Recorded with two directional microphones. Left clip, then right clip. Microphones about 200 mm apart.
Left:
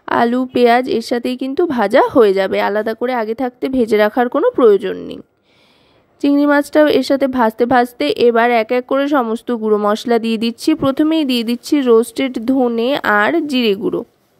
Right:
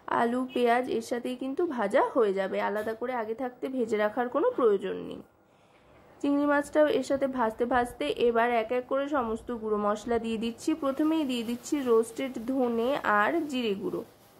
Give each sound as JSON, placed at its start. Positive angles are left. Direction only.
{"t": 0.0, "sound": "a woman's voice", "side_deg": 40}
{"t": 6.2, "sound": "a woman's voice", "side_deg": 45}